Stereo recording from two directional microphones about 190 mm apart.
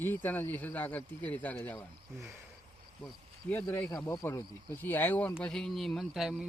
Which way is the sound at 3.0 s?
5° left (ahead or behind).